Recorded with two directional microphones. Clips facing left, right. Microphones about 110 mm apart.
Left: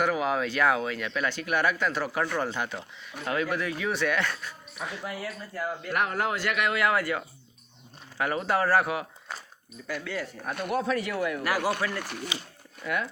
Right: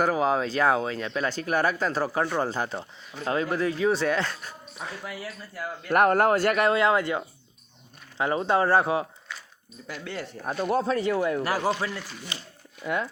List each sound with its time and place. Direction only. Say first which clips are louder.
0.0 s speech: right 3 dB; 35° right (ahead or behind)
5.9 s speech: right 9 dB; 50° right (ahead or behind); by 9.0 s 30° right (ahead or behind)
9.3 s a sound: left 2 dB; 40° left (ahead or behind)
10.0 s speech: even; 30° right (ahead or behind)
11.9 s speech: left 3 dB; 60° left (ahead or behind)
12.8 s speech: right 2 dB; 25° right (ahead or behind)